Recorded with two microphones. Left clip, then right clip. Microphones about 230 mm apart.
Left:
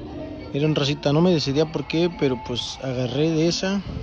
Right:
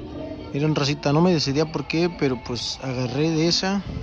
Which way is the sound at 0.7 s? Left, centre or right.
Centre.